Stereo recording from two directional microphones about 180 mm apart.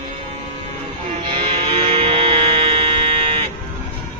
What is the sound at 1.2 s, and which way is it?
Music, 30° right (ahead or behind).